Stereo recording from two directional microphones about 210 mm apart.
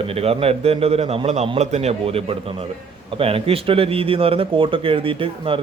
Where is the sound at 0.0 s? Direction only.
25° right (ahead or behind).